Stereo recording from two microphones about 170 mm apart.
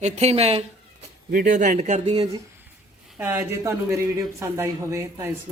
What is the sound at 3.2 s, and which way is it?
Speech, 15° right (ahead or behind).